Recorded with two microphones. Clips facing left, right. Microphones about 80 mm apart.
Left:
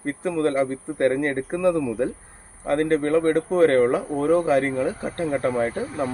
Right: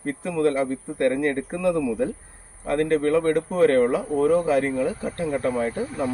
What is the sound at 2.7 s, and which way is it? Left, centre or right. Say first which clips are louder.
Speech: left 1 dB; left.